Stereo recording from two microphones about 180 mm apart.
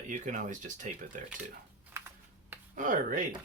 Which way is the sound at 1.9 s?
15° right (ahead or behind).